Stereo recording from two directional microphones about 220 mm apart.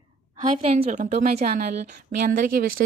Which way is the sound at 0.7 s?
35° right (ahead or behind).